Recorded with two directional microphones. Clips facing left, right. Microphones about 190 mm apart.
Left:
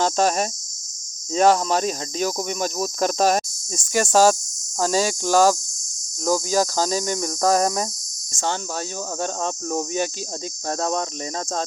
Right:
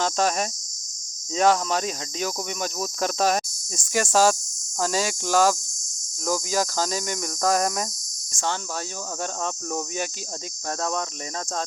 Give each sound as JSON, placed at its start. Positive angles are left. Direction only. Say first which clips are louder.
{"t": 0.0, "sound": "speech", "louder": "left 4 dB", "side_deg": 35}
{"t": 8.3, "sound": "cricket", "louder": "left 2 dB", "side_deg": 25}
{"t": 9.2, "sound": "speech", "louder": "left 3 dB", "side_deg": 30}